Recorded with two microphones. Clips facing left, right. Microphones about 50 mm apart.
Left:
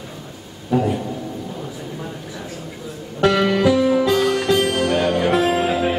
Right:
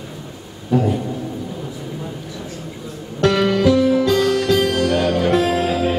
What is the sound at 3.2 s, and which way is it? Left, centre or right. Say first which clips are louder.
Music: right 1 dB; centre.